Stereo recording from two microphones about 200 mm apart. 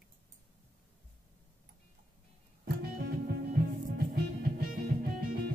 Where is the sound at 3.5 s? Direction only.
50° right (ahead or behind).